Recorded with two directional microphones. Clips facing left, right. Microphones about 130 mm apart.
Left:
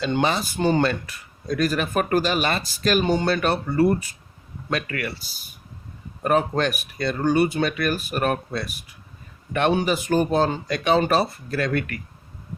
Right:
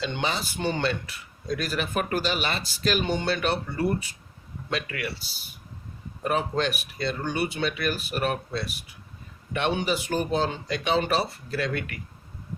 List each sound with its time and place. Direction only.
0.0 s speech: 50° left (ahead or behind)